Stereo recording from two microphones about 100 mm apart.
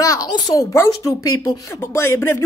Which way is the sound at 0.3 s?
40° left (ahead or behind).